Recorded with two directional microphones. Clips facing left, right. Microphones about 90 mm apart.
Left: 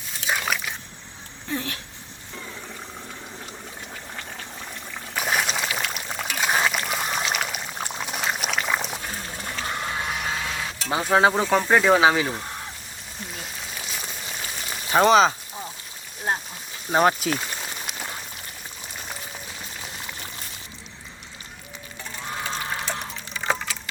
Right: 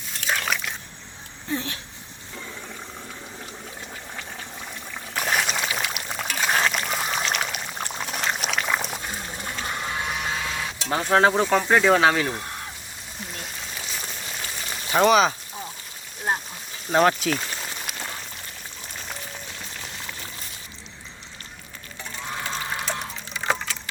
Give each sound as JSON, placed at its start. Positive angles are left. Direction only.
{"t": 0.3, "sound": "biting", "side_deg": 5}
{"t": 1.5, "sound": "speech", "side_deg": -25}
{"t": 5.1, "sound": "pour", "side_deg": 0}
{"t": 9.0, "sound": "printer", "side_deg": -10}
{"t": 10.8, "sound": "speech", "side_deg": 5}
{"t": 13.3, "sound": "raindrop", "side_deg": 0}
{"t": 14.9, "sound": "speech", "side_deg": 35}
{"t": 16.9, "sound": "a sound", "side_deg": 10}
{"t": 18.9, "sound": "boiling", "side_deg": 5}
{"t": 22.9, "sound": "a sound", "side_deg": 0}